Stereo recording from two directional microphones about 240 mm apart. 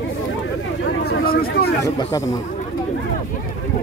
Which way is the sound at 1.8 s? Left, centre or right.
Centre.